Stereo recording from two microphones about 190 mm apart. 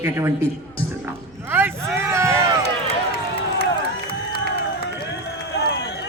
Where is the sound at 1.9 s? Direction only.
15° right (ahead or behind).